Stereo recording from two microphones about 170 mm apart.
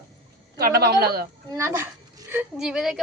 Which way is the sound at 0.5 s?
65° right (ahead or behind).